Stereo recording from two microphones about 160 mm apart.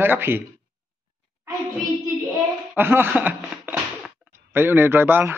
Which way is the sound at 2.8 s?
15° right (ahead or behind).